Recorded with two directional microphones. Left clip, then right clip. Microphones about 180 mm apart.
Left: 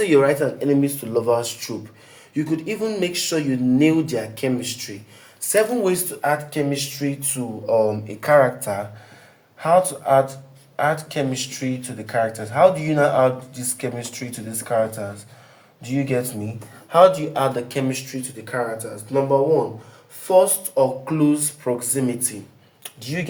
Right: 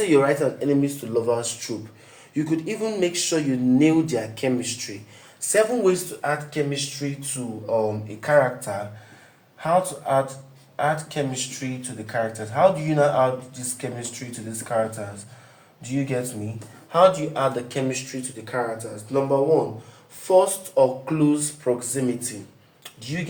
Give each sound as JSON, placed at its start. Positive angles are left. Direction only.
{"t": 0.1, "sound": "speech", "side_deg": 20}
{"t": 2.3, "sound": "speech", "side_deg": 25}
{"t": 22.8, "sound": "a sound", "side_deg": 50}